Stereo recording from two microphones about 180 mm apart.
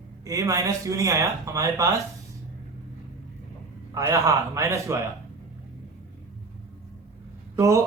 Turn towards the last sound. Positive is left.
turn(degrees=-15)  # may be behind; listen again after turning